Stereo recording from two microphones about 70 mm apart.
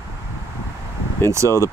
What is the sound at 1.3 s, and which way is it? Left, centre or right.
Speech, right.